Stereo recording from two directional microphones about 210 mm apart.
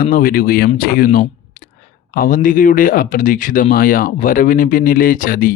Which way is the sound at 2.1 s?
40° left (ahead or behind).